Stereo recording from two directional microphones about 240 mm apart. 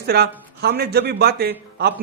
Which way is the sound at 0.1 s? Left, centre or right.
Right.